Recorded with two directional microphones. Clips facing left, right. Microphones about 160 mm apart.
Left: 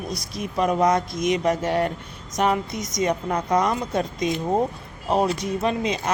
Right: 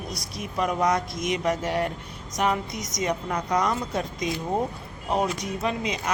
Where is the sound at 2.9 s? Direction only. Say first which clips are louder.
Left 4 dB; 25° left (ahead or behind).